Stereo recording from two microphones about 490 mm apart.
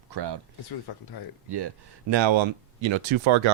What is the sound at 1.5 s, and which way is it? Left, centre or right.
A man's voice, right.